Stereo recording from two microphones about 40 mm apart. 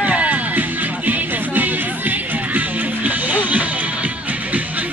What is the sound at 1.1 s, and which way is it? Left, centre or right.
Music, right.